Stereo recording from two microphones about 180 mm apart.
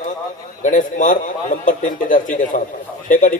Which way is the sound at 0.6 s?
45° left (ahead or behind).